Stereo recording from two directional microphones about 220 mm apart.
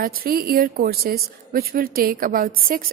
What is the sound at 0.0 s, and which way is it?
A woman's voice, 40° right (ahead or behind).